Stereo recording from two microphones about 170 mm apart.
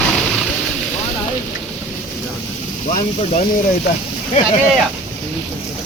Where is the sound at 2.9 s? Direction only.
50° left (ahead or behind).